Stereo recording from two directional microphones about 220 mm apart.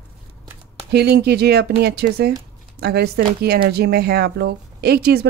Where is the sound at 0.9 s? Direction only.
45° right (ahead or behind).